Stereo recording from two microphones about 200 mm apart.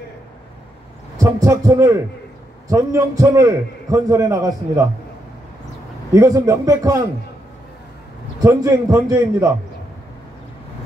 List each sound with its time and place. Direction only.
1.1 s a man's voice: 15° right (ahead or behind)
6.1 s a man's voice: 15° right (ahead or behind)
8.4 s a man's voice: 15° right (ahead or behind)